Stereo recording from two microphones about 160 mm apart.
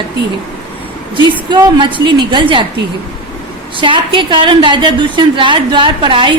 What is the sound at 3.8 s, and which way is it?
A woman's voice, 30° right (ahead or behind).